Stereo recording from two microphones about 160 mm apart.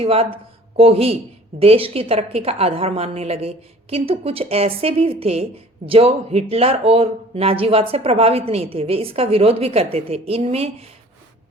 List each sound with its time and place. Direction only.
0.0 s a woman's voice: 35° right (ahead or behind)